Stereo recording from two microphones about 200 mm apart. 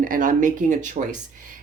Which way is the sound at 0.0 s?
40° right (ahead or behind).